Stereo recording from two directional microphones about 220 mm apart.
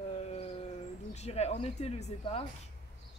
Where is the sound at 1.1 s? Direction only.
30° left (ahead or behind).